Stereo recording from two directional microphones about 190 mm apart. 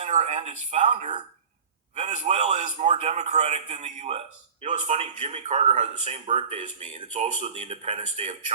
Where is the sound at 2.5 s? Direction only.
45° right (ahead or behind).